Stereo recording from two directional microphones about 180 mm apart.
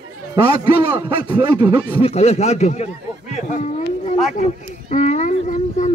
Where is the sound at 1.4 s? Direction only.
20° right (ahead or behind).